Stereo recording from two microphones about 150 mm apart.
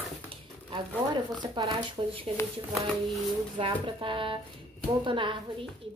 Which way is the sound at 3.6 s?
35° right (ahead or behind).